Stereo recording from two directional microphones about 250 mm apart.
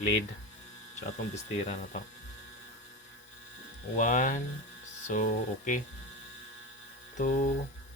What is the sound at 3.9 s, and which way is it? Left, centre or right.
Speech, left.